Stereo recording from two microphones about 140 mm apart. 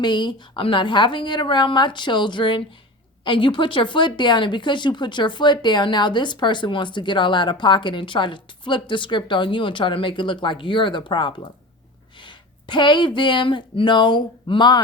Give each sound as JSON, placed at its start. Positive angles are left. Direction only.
{"t": 0.0, "sound": "speech", "side_deg": 30}